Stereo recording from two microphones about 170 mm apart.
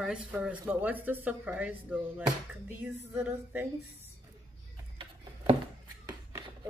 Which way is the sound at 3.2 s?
10° right (ahead or behind).